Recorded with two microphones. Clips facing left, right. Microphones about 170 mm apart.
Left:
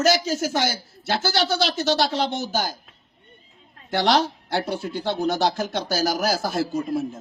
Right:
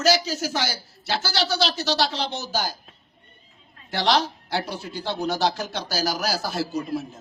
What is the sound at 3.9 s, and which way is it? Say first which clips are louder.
Speech: left 2 dB; 50° left (ahead or behind).